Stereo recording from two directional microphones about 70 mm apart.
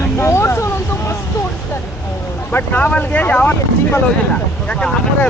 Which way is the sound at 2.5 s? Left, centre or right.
Left.